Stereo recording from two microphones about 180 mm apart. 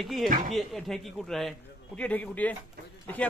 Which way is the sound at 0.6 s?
Centre (ahead or behind).